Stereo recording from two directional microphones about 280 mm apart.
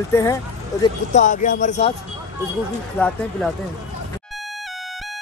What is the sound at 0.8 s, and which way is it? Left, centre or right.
Speech, left.